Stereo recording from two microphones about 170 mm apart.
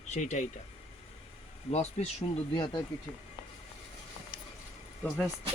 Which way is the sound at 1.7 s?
40° left (ahead or behind).